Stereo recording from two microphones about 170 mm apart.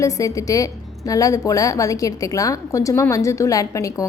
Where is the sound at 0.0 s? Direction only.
20° left (ahead or behind).